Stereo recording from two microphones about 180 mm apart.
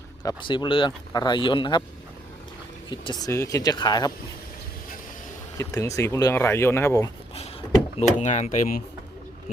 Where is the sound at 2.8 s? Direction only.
25° left (ahead or behind).